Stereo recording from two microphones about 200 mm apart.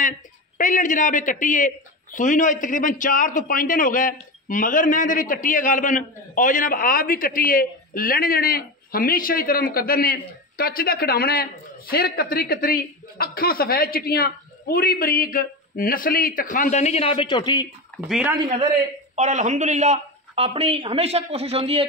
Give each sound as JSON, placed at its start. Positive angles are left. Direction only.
{"t": 0.6, "sound": "a man's voice", "side_deg": 40}
{"t": 17.9, "sound": "speech", "side_deg": 0}
{"t": 19.1, "sound": "speech", "side_deg": -35}